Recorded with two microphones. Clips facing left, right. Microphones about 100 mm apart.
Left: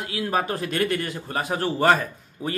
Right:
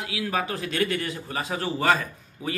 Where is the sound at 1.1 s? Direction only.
50° left (ahead or behind).